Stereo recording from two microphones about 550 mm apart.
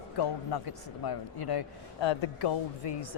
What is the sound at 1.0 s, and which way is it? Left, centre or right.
Speech, left.